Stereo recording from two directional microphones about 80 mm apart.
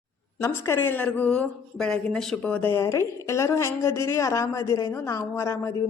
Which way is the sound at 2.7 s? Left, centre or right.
Left.